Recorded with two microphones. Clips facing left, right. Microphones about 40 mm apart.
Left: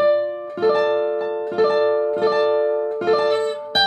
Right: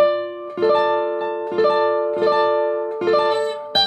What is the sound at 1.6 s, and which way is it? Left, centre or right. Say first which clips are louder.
Music: even; centre.